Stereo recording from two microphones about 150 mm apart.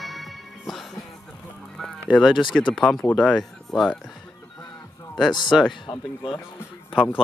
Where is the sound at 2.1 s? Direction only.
Centre (ahead or behind).